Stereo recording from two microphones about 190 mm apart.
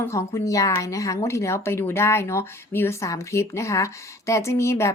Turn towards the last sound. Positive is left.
turn(degrees=15)  # may be behind; listen again after turning